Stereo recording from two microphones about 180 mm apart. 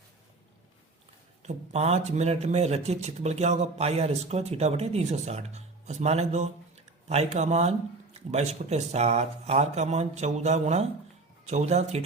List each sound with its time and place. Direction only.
1.4 s speech: 40° right (ahead or behind)